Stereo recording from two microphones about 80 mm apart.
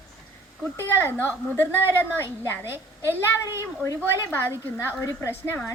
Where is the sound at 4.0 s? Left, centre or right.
Left.